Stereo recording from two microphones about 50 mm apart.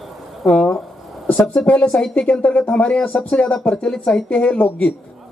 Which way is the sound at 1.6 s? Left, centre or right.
Centre.